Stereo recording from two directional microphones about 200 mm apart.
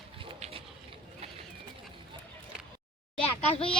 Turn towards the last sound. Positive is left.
turn(degrees=30)  # may be behind; listen again after turning